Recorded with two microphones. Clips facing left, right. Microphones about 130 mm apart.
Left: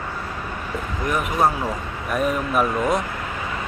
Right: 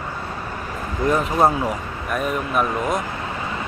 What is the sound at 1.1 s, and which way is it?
Speech, 25° right (ahead or behind).